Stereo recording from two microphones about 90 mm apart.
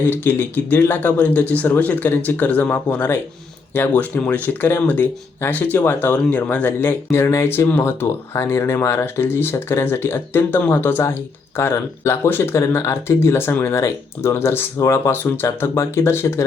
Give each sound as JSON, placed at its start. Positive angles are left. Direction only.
{"t": 0.0, "sound": "speech", "side_deg": 25}